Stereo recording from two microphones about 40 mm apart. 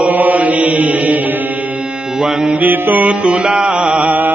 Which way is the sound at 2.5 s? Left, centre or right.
Right.